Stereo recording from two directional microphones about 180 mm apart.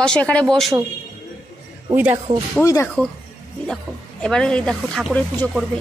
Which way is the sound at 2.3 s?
15° right (ahead or behind).